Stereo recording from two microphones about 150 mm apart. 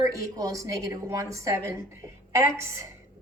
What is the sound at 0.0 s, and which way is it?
A woman's voice, 20° right (ahead or behind).